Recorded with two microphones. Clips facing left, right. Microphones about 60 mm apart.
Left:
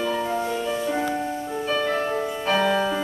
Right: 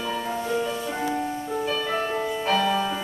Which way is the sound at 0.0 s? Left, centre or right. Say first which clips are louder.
Left 4 dB; centre.